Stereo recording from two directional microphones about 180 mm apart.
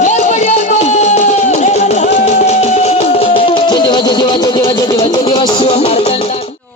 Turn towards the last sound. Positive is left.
turn(degrees=35)  # may be behind; listen again after turning